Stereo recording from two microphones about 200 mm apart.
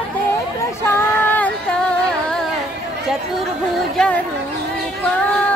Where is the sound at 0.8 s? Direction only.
10° left (ahead or behind).